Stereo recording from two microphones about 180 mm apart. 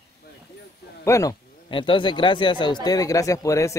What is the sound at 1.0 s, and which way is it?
Speech, 15° left (ahead or behind).